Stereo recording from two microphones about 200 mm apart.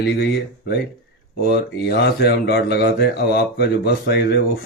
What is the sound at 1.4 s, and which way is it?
Speech, 55° left (ahead or behind).